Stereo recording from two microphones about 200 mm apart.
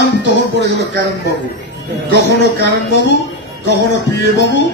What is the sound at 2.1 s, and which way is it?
Speech, 55° left (ahead or behind).